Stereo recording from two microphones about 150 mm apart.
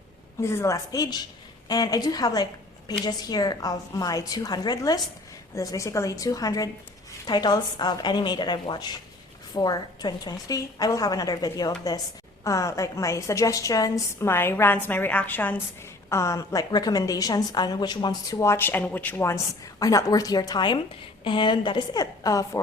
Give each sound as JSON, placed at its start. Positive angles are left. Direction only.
{"t": 0.4, "sound": "a woman's voice", "side_deg": 20}